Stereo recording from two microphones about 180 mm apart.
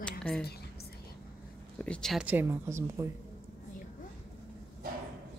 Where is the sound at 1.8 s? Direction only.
5° left (ahead or behind); by 3.1 s 10° right (ahead or behind).